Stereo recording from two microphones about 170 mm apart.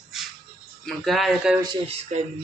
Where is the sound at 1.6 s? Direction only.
30° right (ahead or behind).